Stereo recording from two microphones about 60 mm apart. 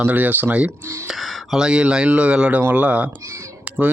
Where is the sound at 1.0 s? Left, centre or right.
Centre.